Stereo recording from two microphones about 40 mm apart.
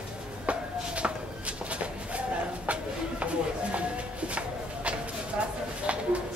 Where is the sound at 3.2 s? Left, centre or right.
Right.